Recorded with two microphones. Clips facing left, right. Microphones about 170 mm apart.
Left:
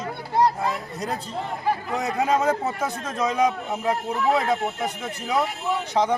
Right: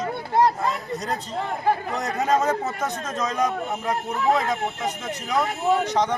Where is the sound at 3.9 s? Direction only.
30° left (ahead or behind).